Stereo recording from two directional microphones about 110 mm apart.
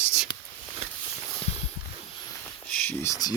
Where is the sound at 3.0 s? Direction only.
30° left (ahead or behind).